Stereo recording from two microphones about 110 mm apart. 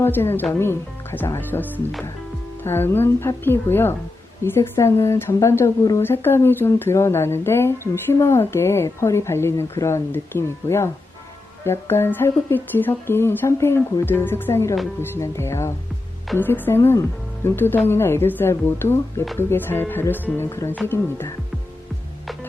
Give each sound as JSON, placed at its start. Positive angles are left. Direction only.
{"t": 0.0, "sound": "a woman's voice", "side_deg": 20}